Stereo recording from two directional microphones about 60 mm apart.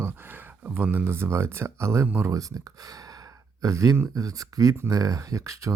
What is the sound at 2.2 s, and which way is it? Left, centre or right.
Speech, right.